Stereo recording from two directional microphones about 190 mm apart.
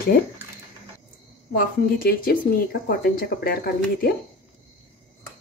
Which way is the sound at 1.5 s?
50° left (ahead or behind).